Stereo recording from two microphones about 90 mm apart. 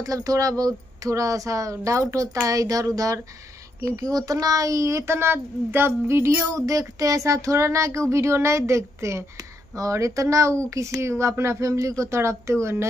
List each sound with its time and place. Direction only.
0.0 s a child's voice: 40° right (ahead or behind)